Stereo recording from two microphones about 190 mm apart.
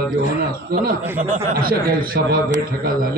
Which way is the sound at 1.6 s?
50° right (ahead or behind).